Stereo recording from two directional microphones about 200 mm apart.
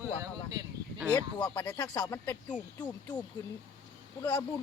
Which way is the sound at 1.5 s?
20° left (ahead or behind).